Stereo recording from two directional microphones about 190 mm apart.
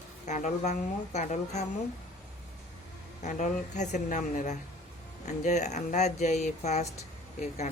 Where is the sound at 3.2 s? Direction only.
40° left (ahead or behind).